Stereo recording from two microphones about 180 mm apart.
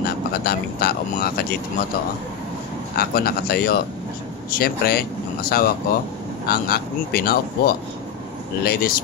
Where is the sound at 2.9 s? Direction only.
60° left (ahead or behind).